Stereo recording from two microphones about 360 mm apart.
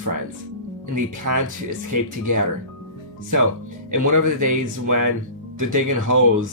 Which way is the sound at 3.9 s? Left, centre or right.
Right.